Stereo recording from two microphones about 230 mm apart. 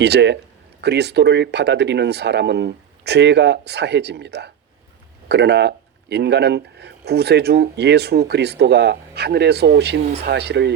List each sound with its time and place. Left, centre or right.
0.0 s speech: right